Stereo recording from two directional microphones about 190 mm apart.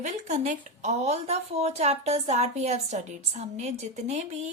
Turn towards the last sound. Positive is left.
turn(degrees=-35)  # may be behind; listen again after turning